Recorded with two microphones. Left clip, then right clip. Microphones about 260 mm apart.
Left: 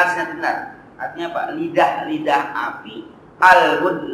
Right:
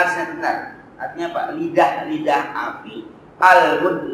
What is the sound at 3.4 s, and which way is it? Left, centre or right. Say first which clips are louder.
Speech: even; centre.